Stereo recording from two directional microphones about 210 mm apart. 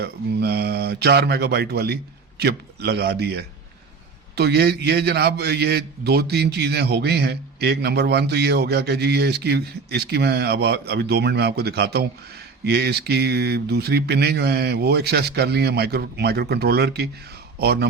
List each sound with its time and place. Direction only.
0.0 s a man's voice: 50° right (ahead or behind)